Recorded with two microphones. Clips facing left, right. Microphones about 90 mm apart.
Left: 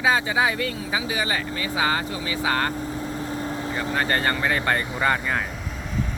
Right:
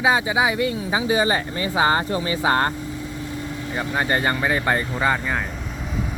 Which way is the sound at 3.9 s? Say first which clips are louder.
Right 2 dB; 15° right (ahead or behind).